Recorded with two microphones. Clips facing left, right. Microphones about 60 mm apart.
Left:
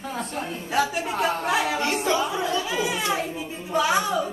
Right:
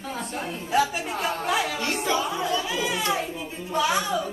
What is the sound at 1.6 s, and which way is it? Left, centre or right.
Music, left.